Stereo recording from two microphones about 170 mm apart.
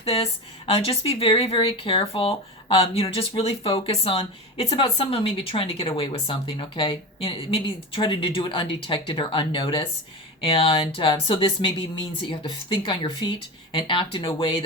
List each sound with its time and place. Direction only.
0.0 s speech: 35° left (ahead or behind)